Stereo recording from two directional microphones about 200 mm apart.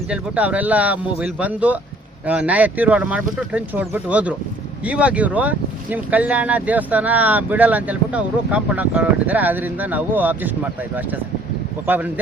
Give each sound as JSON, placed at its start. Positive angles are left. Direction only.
{"t": 0.1, "sound": "speech", "side_deg": -5}
{"t": 11.9, "sound": "speech", "side_deg": -10}